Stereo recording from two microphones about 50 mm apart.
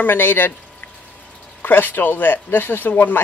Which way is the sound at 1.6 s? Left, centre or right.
Left.